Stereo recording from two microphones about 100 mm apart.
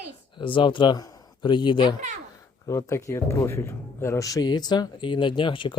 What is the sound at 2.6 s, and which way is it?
Speech, 30° left (ahead or behind).